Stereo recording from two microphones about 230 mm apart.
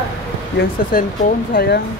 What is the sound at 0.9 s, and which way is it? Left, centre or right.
Speech, left.